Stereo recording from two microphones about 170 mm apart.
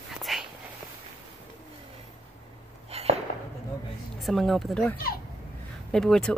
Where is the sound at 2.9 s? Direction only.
40° right (ahead or behind).